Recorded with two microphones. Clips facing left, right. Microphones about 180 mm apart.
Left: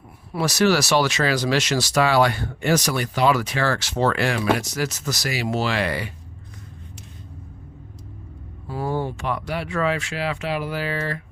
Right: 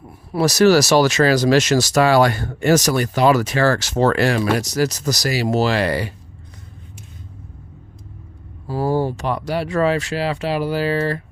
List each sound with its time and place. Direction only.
0.3 s speech: 40° right (ahead or behind)
8.6 s speech: 35° right (ahead or behind)